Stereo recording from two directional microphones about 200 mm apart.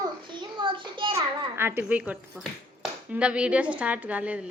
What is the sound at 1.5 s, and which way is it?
A woman's voice, 10° right (ahead or behind).